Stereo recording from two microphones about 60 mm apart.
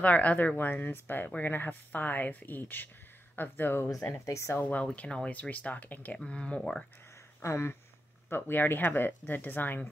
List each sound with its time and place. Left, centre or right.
0.0 s speech: left
4.3 s speech: left
4.9 s speech: centre
7.4 s speech: left
8.3 s speech: left